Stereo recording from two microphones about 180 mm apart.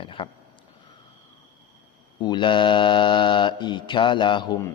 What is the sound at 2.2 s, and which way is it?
Mantra, 25° left (ahead or behind).